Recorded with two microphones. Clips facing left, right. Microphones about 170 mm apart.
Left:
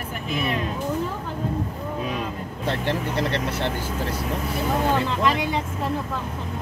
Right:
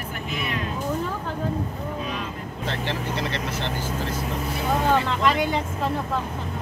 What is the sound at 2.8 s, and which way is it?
Speech, 55° left (ahead or behind).